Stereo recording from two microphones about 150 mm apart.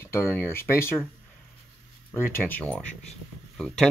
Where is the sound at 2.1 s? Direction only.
15° left (ahead or behind).